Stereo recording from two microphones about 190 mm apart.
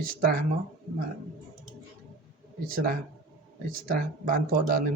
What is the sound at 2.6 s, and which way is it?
Speech, 50° right (ahead or behind).